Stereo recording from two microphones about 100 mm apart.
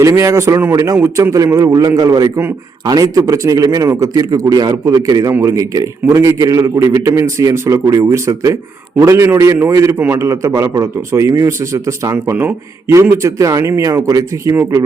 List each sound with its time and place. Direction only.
0.0 s a man's voice: 30° right (ahead or behind)